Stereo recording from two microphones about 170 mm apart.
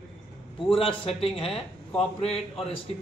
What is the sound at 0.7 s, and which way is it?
Speech, 30° left (ahead or behind).